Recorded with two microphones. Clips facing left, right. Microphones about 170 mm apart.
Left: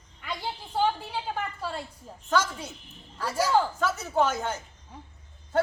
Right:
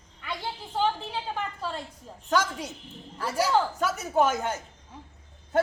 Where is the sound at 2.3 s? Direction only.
15° right (ahead or behind).